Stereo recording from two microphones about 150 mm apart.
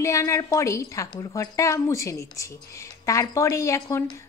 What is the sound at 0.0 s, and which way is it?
Speech, 20° left (ahead or behind).